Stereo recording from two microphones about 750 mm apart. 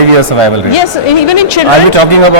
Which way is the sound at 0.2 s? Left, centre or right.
Right.